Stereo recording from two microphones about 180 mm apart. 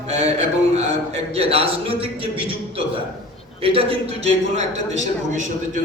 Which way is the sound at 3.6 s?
30° right (ahead or behind).